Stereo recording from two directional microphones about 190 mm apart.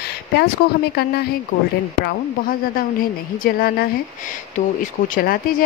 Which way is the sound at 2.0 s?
50° left (ahead or behind).